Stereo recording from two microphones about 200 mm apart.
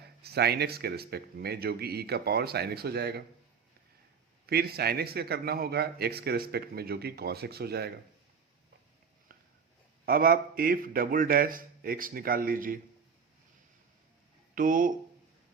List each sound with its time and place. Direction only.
0.2 s speech: 55° right (ahead or behind)
4.4 s speech: 50° right (ahead or behind)
10.1 s speech: 45° right (ahead or behind)
14.5 s speech: 45° right (ahead or behind)